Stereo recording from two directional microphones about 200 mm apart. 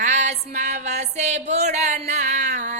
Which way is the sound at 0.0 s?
35° right (ahead or behind).